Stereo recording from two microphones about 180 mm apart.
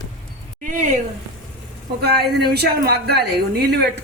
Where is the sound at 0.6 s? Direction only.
45° right (ahead or behind).